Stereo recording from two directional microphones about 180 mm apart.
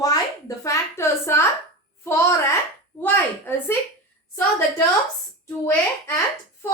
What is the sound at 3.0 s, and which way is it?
Speech, 10° left (ahead or behind).